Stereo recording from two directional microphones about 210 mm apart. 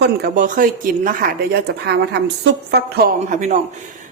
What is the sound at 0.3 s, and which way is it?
Speech, 40° right (ahead or behind).